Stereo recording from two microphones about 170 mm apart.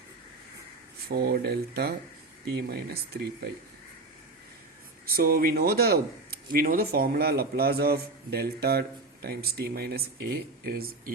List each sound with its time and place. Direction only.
1.0 s speech: 65° right (ahead or behind)
5.0 s a man's voice: 60° right (ahead or behind)